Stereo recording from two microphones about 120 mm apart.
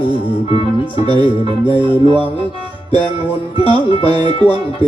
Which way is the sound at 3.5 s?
50° left (ahead or behind).